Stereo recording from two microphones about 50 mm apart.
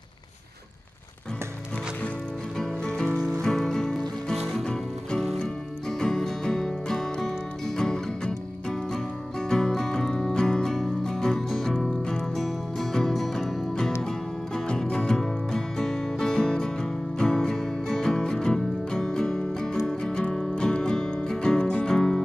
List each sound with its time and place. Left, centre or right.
2.8 s music: centre
3.4 s music: centre